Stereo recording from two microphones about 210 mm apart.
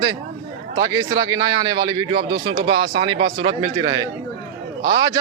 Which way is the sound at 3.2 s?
70° right (ahead or behind).